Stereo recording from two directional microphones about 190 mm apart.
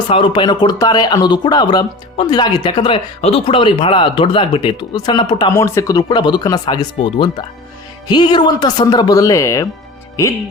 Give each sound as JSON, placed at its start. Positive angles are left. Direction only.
{"t": 0.1, "sound": "speech", "side_deg": 25}